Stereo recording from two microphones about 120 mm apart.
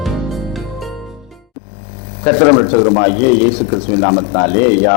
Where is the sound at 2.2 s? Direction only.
25° left (ahead or behind).